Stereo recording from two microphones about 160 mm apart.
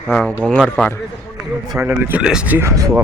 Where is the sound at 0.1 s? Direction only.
5° left (ahead or behind).